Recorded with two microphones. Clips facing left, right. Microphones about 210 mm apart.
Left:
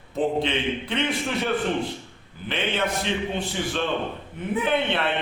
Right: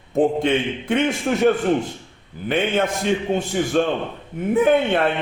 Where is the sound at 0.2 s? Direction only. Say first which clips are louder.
Right 6 dB; 50° right (ahead or behind).